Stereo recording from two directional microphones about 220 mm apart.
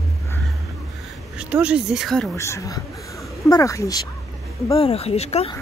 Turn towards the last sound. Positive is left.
turn(degrees=30)  # may be behind; listen again after turning